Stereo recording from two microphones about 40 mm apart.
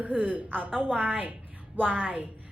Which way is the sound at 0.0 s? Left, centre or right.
Right.